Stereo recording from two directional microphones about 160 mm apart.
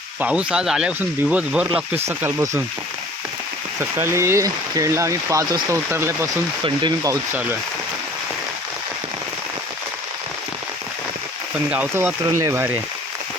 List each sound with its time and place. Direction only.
0.2 s speech: 5° right (ahead or behind)
3.8 s speech: 15° right (ahead or behind)
11.7 s speech: 10° right (ahead or behind)